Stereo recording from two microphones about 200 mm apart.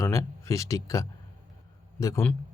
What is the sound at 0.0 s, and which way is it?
Speech, 15° left (ahead or behind).